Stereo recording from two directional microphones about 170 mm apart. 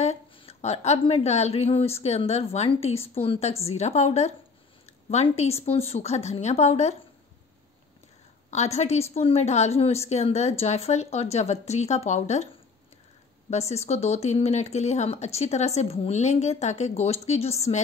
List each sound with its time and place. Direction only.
0.0 s speech: 40° left (ahead or behind)
8.5 s speech: 40° left (ahead or behind)
13.5 s speech: 40° left (ahead or behind)